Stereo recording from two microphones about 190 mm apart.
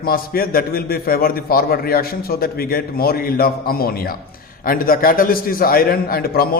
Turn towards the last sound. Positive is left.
turn(degrees=50)  # may be behind; listen again after turning